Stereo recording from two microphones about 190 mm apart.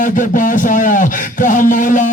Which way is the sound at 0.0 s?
45° left (ahead or behind).